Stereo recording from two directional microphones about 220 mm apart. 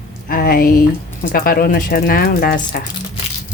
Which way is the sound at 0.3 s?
40° left (ahead or behind).